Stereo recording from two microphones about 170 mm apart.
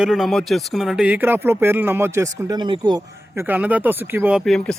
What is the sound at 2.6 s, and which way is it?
Speech, 25° right (ahead or behind).